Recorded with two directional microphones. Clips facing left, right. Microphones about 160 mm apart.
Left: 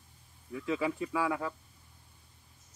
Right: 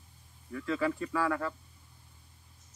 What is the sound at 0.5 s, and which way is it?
Speech, 15° left (ahead or behind).